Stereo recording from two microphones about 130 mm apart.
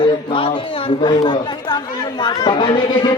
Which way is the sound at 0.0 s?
40° left (ahead or behind).